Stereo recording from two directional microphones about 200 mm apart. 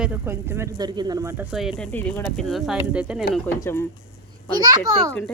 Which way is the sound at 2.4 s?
Centre (ahead or behind).